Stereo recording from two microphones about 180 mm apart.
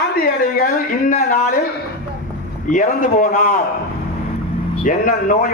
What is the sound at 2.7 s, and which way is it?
Speech, 45° left (ahead or behind).